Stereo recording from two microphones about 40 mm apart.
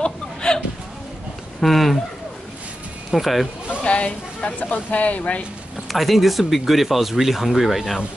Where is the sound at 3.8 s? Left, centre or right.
Left.